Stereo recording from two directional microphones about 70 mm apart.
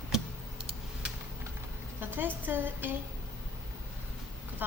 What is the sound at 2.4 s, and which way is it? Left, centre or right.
Speech, right.